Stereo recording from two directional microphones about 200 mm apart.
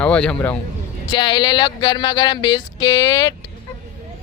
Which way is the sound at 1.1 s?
20° left (ahead or behind).